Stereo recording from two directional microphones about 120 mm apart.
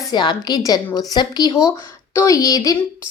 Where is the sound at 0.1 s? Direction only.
35° left (ahead or behind).